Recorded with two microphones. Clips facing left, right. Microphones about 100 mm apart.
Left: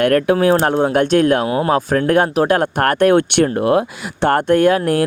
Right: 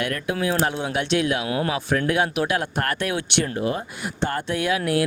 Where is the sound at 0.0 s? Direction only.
55° left (ahead or behind).